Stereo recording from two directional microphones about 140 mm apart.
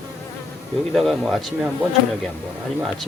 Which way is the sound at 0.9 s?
Centre (ahead or behind).